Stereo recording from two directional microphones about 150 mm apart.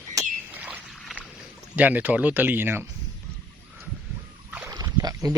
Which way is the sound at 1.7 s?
10° right (ahead or behind).